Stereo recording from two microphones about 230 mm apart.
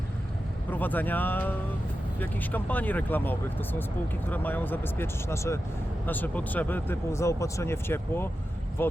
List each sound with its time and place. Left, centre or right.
0.7 s speech: centre